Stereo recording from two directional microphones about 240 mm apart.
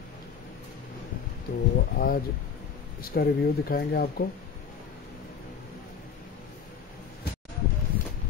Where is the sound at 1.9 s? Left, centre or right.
Left.